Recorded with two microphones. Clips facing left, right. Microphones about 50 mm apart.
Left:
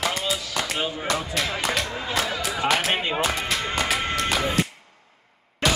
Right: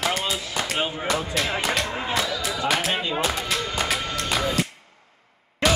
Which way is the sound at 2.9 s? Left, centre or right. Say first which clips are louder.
Left 1 dB; left.